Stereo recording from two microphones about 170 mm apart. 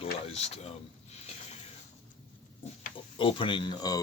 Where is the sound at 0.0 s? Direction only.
35° left (ahead or behind).